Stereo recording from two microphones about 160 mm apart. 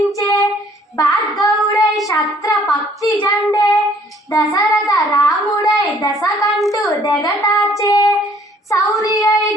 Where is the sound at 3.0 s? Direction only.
25° left (ahead or behind).